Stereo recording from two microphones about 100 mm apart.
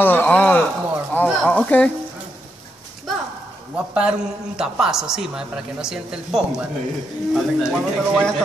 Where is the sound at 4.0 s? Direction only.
10° right (ahead or behind).